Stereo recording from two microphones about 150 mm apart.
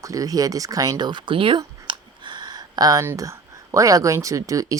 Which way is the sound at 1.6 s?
30° right (ahead or behind).